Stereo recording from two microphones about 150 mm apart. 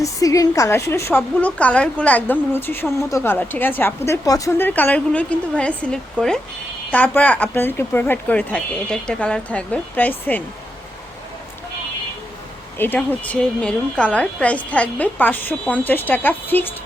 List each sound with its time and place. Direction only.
0.0 s a woman's voice: 20° left (ahead or behind)
12.8 s a woman's voice: 10° left (ahead or behind)